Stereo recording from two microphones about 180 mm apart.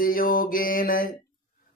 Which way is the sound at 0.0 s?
50° left (ahead or behind).